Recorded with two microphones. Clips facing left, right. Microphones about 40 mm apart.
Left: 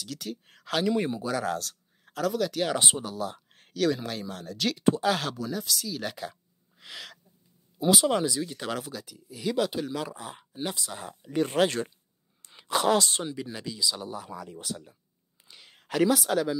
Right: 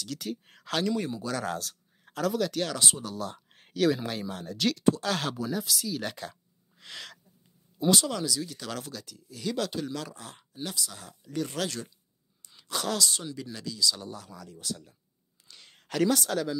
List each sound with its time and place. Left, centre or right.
0.0 s speech: centre
0.9 s speech: left
1.3 s speech: centre
2.7 s speech: left
3.1 s speech: centre
4.7 s speech: centre
5.3 s speech: centre
6.8 s gasp: centre
7.8 s speech: centre
8.1 s speech: left
8.7 s speech: centre; by 13.3 s left
13.3 s speech: left
15.4 s a sound: centre